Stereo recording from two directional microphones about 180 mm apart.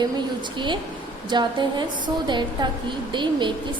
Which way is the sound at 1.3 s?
25° right (ahead or behind).